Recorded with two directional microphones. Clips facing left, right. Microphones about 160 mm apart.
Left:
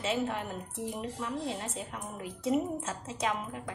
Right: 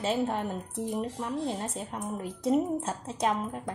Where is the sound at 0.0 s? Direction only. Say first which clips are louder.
Right 3 dB; 35° right (ahead or behind).